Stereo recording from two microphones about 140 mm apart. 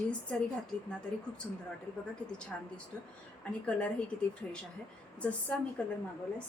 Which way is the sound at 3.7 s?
10° left (ahead or behind).